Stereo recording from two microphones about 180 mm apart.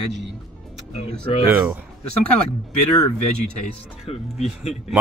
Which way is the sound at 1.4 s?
10° right (ahead or behind).